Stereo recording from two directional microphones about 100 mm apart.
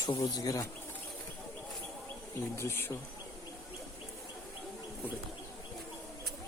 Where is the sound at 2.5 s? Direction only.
25° left (ahead or behind).